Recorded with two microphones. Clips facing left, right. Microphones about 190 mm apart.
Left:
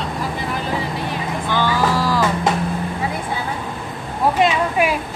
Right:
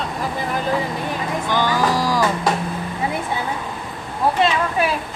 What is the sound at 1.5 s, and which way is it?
Speech, 15° right (ahead or behind).